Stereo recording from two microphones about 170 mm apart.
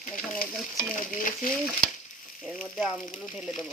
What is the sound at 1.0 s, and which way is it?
Stir, 50° left (ahead or behind).